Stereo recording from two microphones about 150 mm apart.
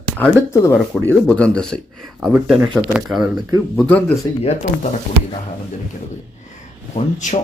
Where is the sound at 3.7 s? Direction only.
10° left (ahead or behind).